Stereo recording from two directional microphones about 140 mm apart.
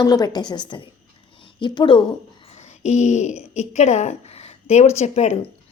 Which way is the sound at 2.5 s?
55° left (ahead or behind).